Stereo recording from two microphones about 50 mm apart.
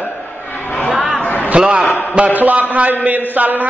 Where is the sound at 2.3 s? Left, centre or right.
Right.